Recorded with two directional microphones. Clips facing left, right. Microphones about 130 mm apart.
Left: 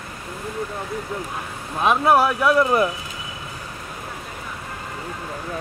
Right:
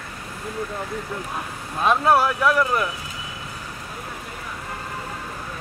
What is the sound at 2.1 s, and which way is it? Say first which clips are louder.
Speech: left 2 dB; 20° left (ahead or behind).